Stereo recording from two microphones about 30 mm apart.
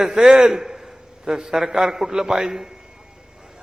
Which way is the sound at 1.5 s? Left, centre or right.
Centre.